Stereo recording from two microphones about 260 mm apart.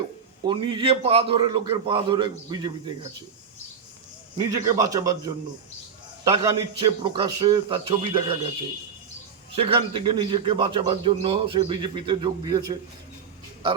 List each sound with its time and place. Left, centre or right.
0.4 s a man's voice: centre
4.8 s a man's voice: centre
9.6 s a man's voice: right